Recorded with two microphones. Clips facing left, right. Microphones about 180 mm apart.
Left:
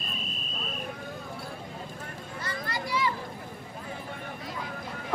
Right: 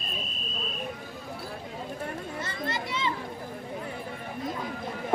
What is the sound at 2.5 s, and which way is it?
Children playing, 25° right (ahead or behind).